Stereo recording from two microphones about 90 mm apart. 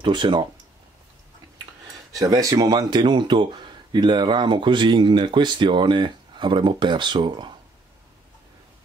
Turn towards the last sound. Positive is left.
turn(degrees=-60)  # may be behind; listen again after turning